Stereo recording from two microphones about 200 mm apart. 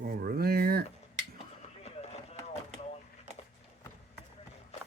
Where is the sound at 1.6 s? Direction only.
30° left (ahead or behind).